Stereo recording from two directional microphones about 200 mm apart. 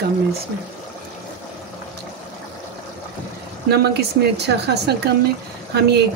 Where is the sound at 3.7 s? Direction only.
55° right (ahead or behind).